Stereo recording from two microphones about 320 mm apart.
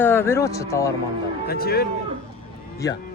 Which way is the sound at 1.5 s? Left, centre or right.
Left.